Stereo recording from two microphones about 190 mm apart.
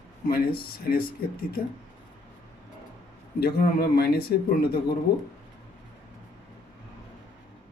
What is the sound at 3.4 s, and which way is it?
Speech, 55° left (ahead or behind).